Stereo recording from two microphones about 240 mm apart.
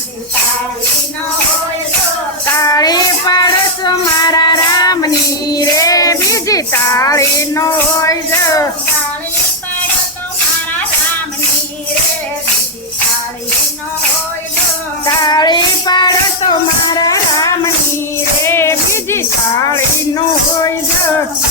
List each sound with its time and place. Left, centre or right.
2.6 s child singing: centre
15.2 s child singing: centre
17.0 s music: centre